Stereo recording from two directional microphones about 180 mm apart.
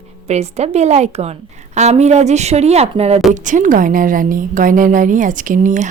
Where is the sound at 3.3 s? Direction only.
45° right (ahead or behind).